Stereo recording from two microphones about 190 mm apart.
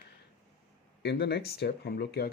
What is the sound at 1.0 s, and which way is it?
Speech, 60° left (ahead or behind).